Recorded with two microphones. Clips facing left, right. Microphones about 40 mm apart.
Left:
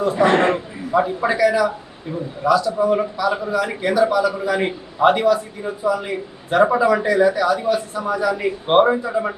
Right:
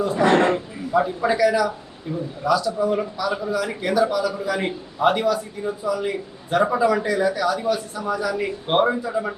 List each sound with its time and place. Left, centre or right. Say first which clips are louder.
0.0 s a man's voice: left 2 dB; centre
0.3 s a man's voice: left 1 dB; left